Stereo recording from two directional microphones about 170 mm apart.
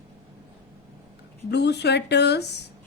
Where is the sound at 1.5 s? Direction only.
80° left.